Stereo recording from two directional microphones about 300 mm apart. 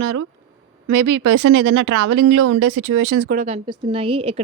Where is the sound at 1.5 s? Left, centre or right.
Right.